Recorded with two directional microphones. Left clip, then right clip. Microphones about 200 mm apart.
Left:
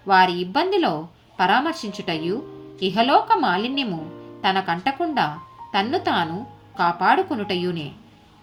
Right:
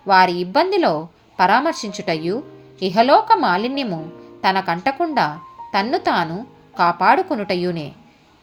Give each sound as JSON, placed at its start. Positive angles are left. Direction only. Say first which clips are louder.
{"t": 0.1, "sound": "a woman's voice", "louder": "right 3 dB", "side_deg": -30}